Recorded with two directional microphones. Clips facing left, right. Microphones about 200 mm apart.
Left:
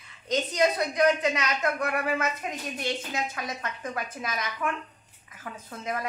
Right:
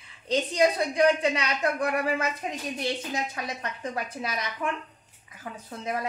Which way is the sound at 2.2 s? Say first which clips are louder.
Even; 30° right (ahead or behind).